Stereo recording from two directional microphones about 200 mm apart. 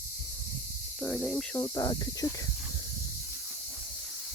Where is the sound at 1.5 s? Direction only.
20° left (ahead or behind).